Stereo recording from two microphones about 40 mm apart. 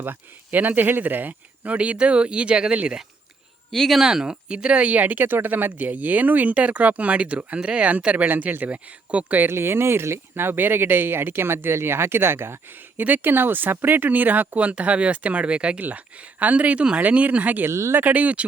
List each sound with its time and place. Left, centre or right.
0.0 s speech: right
3.7 s speech: centre
3.9 s speech: centre
4.9 s speech: right
8.3 s speech: right
9.5 s speech: right
13.0 s speech: right
15.8 s speech: right
16.7 s speech: right
17.0 s speech: right